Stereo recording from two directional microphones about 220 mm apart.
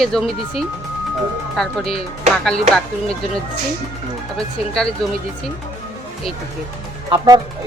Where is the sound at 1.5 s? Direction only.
Centre (ahead or behind).